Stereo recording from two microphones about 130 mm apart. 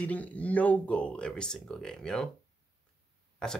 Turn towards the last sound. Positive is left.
turn(degrees=5)  # may be behind; listen again after turning